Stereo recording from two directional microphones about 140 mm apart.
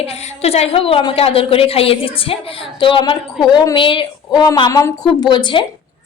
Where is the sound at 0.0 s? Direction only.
50° left (ahead or behind).